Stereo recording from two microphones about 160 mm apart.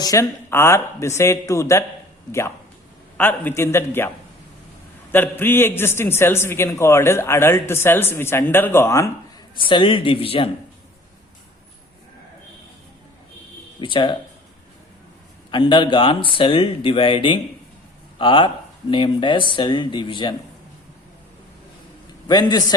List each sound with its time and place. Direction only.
0.0 s a man's voice: 20° left (ahead or behind)
3.2 s a man's voice: 10° left (ahead or behind)
5.1 s a man's voice: 15° left (ahead or behind)
9.6 s speech: 30° left (ahead or behind)
13.8 s speech: 30° left (ahead or behind)
15.4 s speech: 30° left (ahead or behind)
22.3 s a man's voice: 25° left (ahead or behind)